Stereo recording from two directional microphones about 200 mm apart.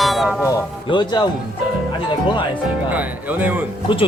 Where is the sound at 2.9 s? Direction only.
10° right (ahead or behind).